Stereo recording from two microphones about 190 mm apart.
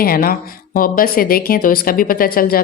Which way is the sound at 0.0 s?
50° left (ahead or behind).